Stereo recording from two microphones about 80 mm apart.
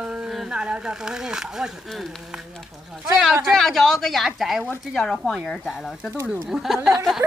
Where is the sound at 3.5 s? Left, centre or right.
Centre.